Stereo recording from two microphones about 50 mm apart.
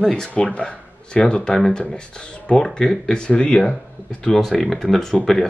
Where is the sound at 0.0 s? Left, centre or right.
Centre.